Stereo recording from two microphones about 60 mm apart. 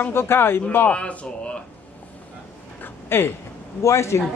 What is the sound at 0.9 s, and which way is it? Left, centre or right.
Speech, centre.